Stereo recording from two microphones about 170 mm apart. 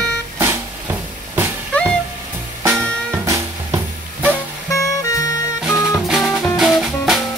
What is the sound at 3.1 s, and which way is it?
Music, 15° right (ahead or behind).